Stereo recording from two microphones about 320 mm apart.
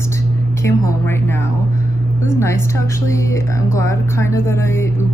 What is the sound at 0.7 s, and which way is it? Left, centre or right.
Speech, centre.